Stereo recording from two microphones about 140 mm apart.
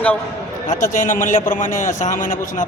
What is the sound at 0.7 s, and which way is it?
A man's voice, 65° left (ahead or behind).